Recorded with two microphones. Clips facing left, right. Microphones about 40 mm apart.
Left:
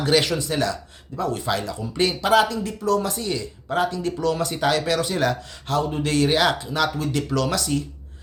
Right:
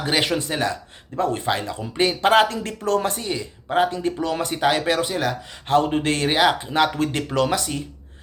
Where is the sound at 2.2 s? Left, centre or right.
Right.